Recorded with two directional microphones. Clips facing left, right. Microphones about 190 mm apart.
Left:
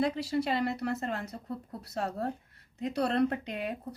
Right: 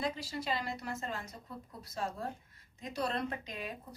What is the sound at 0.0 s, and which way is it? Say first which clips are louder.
A woman's voice: left 8 dB; 65° left (ahead or behind).